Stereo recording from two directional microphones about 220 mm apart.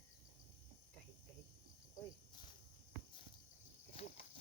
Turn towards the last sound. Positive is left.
turn(degrees=35)  # may be behind; listen again after turning